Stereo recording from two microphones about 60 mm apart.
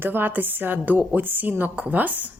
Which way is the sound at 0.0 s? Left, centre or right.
Right.